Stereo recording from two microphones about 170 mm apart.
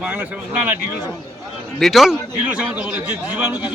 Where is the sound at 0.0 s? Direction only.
10° right (ahead or behind).